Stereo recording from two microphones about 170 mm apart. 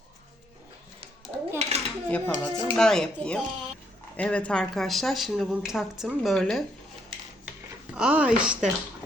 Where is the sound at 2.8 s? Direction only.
5° left (ahead or behind).